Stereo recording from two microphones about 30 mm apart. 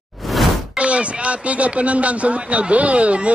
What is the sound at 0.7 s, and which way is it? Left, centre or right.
Speech, right.